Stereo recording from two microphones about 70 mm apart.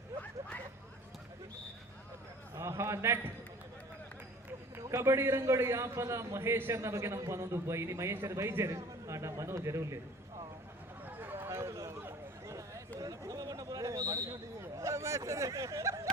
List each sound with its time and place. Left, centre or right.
2.6 s a man's voice: right
4.8 s a man's voice: right
11.0 s a sound: right
14.6 s speech: right